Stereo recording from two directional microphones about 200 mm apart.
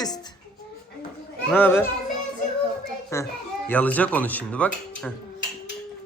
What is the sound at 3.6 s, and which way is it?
Speech, 10° left (ahead or behind).